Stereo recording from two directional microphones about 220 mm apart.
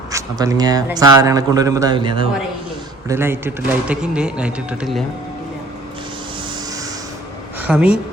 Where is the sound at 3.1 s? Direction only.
10° right (ahead or behind).